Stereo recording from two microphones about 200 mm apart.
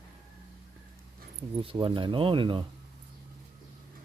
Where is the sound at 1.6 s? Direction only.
25° right (ahead or behind).